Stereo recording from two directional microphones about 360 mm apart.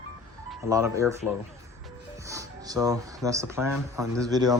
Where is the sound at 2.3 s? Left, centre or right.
Centre.